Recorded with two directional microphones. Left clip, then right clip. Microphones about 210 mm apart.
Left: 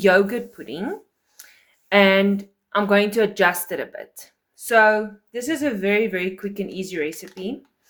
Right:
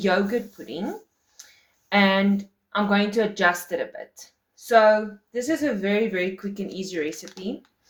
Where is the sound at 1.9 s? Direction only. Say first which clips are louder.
Left 5 dB; 45° left (ahead or behind).